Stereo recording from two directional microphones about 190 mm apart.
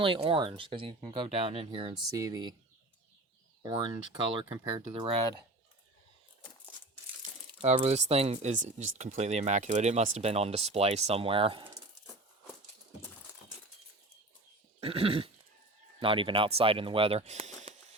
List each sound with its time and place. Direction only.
0.0 s speech: 30° right (ahead or behind)
2.0 s speech: 15° right (ahead or behind)
3.6 s speech: 25° right (ahead or behind)
7.2 s speech: 35° right (ahead or behind)
14.8 s goat: 30° right (ahead or behind)
16.0 s speech: 25° right (ahead or behind)